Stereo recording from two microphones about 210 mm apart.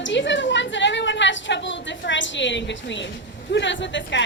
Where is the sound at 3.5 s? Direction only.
60° left (ahead or behind).